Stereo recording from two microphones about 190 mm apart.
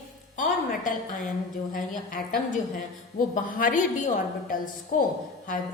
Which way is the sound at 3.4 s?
45° left (ahead or behind).